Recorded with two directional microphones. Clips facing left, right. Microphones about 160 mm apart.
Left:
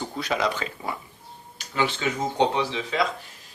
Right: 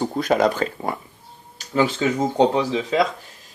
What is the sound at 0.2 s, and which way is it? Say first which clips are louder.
Speech: right 7 dB; 45° right (ahead or behind).